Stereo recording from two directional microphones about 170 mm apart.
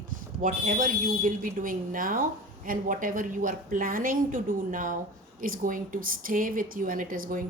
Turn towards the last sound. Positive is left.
turn(degrees=-55)  # may be behind; listen again after turning